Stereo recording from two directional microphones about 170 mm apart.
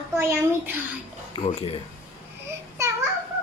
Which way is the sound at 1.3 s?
35° left (ahead or behind).